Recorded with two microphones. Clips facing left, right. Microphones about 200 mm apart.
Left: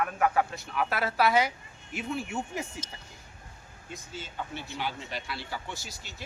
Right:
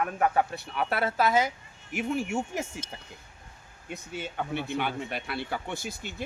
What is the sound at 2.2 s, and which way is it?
Speech, 45° right (ahead or behind).